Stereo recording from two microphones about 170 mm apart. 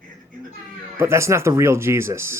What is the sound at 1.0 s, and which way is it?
Speech, 15° right (ahead or behind).